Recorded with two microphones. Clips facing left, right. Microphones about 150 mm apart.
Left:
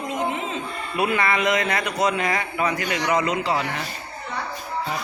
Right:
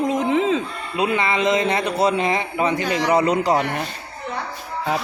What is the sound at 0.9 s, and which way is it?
A man's voice, 20° right (ahead or behind).